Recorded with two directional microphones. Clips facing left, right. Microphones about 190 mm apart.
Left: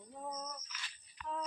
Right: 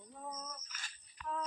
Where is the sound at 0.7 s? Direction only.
45° right (ahead or behind).